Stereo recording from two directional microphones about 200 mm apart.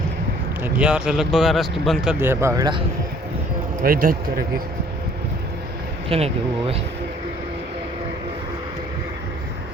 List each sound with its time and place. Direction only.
0.6 s speech: 5° right (ahead or behind)
3.8 s speech: 45° right (ahead or behind)
6.1 s speech: 30° right (ahead or behind)